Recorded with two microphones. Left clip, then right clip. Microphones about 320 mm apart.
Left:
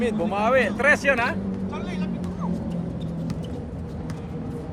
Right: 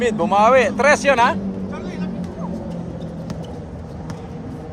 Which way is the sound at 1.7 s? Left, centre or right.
Left.